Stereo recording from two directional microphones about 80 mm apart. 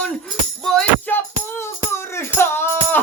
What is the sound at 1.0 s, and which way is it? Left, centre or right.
Music, left.